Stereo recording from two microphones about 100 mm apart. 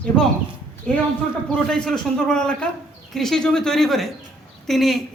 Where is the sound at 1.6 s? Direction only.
5° left (ahead or behind).